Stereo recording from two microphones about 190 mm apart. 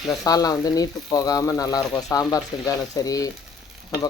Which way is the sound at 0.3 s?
20° left (ahead or behind).